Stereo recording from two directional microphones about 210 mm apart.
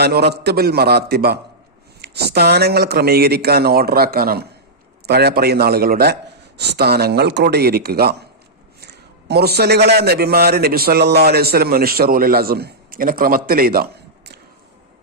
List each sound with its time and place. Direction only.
0.0 s a man's voice: 50° right (ahead or behind)